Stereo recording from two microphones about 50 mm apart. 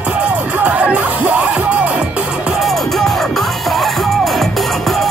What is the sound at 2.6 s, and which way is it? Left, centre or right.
Music, centre.